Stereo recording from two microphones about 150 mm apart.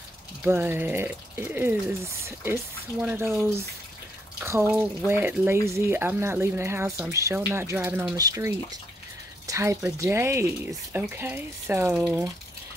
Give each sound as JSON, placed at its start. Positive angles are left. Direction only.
{"t": 0.4, "sound": "speech", "side_deg": -15}
{"t": 4.4, "sound": "speech", "side_deg": -15}